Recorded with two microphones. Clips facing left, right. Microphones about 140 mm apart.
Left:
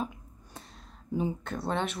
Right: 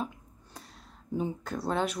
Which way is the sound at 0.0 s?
Centre (ahead or behind).